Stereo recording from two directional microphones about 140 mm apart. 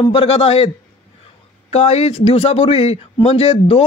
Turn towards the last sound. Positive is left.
turn(degrees=45)  # may be behind; listen again after turning